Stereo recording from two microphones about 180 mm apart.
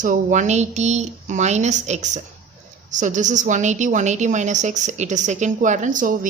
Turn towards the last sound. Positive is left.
turn(degrees=-45)  # may be behind; listen again after turning